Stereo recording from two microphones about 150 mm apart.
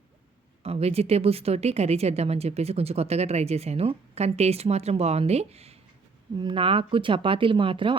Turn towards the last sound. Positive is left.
turn(degrees=-35)  # may be behind; listen again after turning